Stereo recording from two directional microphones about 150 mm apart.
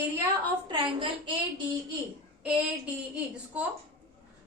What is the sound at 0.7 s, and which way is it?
Speech, 35° right (ahead or behind).